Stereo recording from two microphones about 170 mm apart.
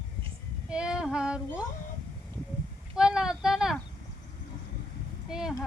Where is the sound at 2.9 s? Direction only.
5° right (ahead or behind).